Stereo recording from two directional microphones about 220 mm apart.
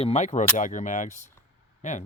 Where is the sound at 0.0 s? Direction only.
30° left (ahead or behind).